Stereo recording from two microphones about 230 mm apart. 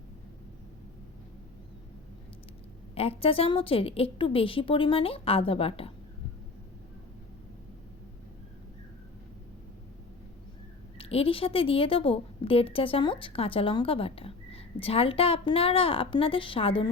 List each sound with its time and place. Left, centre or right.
2.9 s a woman's voice: left
10.9 s a woman's voice: left